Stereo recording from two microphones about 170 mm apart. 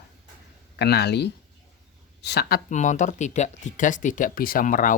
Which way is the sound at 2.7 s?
45° left (ahead or behind).